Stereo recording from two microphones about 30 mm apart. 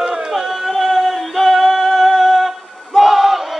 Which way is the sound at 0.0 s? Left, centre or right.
Right.